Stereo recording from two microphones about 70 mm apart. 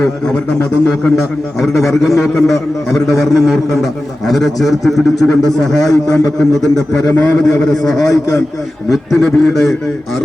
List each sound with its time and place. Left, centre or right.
0.9 s a man's voice: centre
8.0 s a man's voice: left
8.9 s a man's voice: centre